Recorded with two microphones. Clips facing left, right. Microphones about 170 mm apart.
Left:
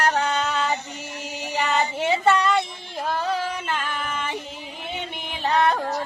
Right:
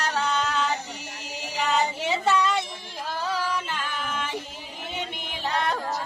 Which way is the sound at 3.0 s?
60° left (ahead or behind).